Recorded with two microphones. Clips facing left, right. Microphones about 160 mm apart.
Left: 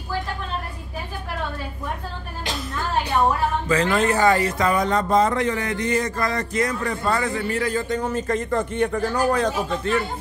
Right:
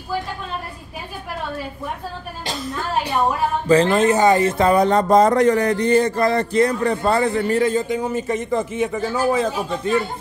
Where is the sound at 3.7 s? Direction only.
25° right (ahead or behind).